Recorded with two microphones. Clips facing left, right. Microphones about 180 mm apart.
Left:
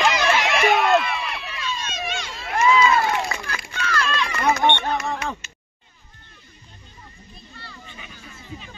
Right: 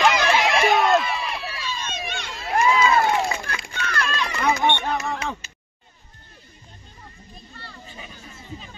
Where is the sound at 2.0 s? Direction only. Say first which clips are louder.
Left 3 dB; 60° right (ahead or behind).